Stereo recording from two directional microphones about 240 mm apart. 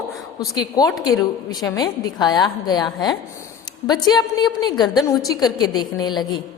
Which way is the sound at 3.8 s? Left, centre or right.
Centre.